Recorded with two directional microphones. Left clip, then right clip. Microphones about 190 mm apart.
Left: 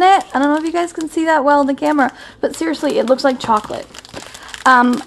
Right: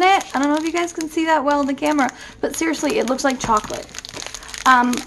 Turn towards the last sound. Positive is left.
turn(degrees=45)  # may be behind; listen again after turning